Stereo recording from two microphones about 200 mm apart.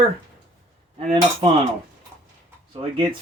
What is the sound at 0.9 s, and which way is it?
Cutlery, 30° right (ahead or behind).